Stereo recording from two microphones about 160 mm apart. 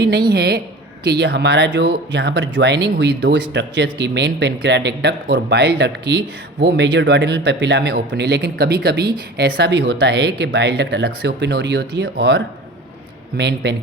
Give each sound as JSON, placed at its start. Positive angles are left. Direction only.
{"t": 0.3, "sound": "speech", "side_deg": -90}